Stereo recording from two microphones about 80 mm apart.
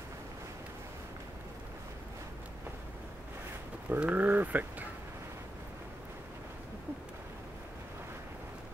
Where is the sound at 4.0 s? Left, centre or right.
Right.